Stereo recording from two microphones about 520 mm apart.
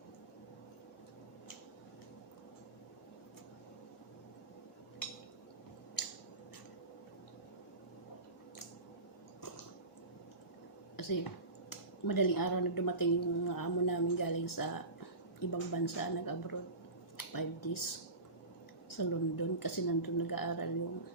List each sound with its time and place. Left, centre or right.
10.9 s a sound: left
11.7 s speech: left
18.9 s speech: left